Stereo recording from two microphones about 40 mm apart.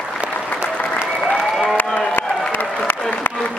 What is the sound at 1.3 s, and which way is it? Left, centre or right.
Applause, centre.